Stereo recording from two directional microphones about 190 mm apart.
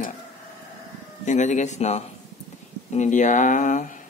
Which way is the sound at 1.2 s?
40° left (ahead or behind).